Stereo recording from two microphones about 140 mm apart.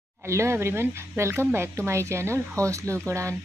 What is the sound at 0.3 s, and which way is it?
Speech, 20° right (ahead or behind).